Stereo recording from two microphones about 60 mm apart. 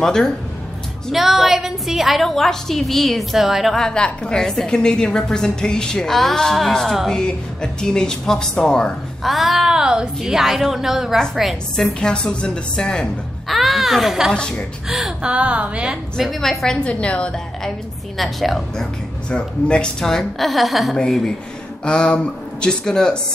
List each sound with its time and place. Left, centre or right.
0.0 s a woman's voice: centre
1.1 s a woman's voice: centre
3.7 s a woman's voice: centre
9.2 s a woman's voice: centre
11.7 s a woman's voice: centre
13.5 s a sound: centre
14.3 s a woman's voice: centre
14.9 s speech: centre
15.2 s a woman's voice: centre
16.2 s a woman's voice: centre
16.8 s a woman's voice: centre
18.1 s a woman's voice: centre
19.3 s a woman's voice: centre
21.8 s a woman's voice: centre